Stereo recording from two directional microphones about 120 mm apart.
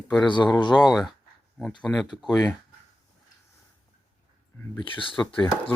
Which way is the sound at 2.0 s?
5° left (ahead or behind).